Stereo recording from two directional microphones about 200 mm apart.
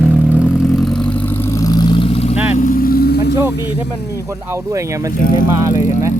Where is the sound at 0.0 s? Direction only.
10° right (ahead or behind).